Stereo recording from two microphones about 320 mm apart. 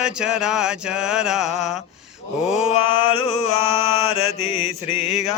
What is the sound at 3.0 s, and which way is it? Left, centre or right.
Mantra, centre.